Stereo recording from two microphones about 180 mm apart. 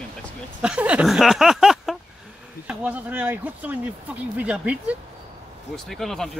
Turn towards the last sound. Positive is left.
turn(degrees=0)  # may be behind; listen again after turning